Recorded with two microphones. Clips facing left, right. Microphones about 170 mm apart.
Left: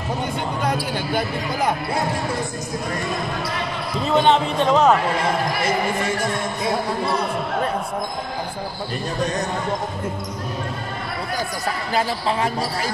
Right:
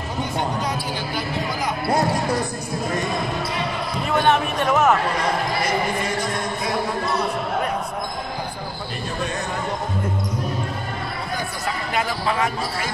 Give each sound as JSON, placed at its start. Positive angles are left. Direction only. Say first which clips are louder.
{"t": 0.6, "sound": "basketball bounce", "louder": "left 3 dB", "side_deg": 55}
{"t": 4.0, "sound": "music", "louder": "left 2 dB", "side_deg": 20}
{"t": 11.9, "sound": "speech", "louder": "left 2 dB", "side_deg": 30}